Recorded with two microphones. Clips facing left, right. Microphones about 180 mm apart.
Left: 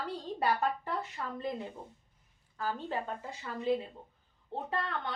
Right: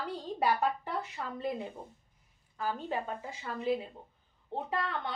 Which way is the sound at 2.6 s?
15° right (ahead or behind).